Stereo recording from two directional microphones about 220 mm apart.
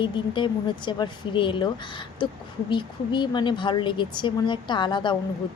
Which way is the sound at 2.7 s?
20° left (ahead or behind).